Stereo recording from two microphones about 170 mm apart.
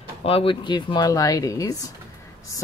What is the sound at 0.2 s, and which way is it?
Speech, 35° left (ahead or behind).